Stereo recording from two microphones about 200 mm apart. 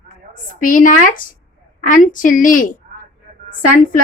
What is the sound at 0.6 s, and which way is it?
A woman's voice, 40° left (ahead or behind).